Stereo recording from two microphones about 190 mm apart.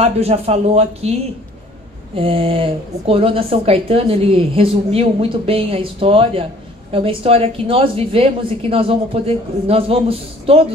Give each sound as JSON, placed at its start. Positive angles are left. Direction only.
{"t": 0.0, "sound": "speech", "side_deg": -30}
{"t": 2.1, "sound": "a woman's voice", "side_deg": -30}